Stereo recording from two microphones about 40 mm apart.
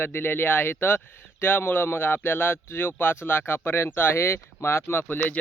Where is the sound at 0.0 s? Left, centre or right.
Left.